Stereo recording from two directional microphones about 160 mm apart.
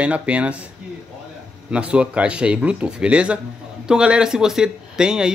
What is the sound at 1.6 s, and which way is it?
Speech, 5° right (ahead or behind).